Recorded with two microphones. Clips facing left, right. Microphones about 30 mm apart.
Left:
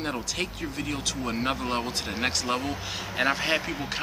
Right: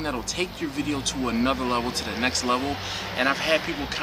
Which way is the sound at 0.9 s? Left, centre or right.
Centre.